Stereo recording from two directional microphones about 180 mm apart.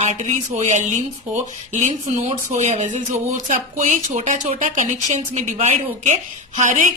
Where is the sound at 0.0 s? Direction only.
40° right (ahead or behind).